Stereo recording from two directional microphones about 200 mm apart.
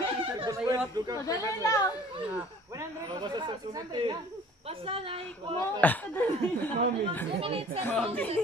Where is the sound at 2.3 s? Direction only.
15° right (ahead or behind).